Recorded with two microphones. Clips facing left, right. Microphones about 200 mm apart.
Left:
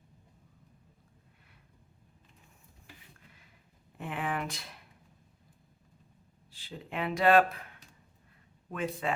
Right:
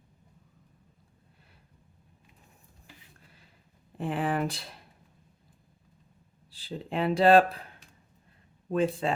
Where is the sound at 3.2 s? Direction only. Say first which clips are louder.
Right 1 dB; 35° right (ahead or behind).